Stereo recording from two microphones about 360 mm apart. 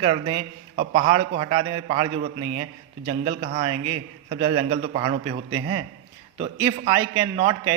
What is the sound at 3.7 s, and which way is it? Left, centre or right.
Speech, right.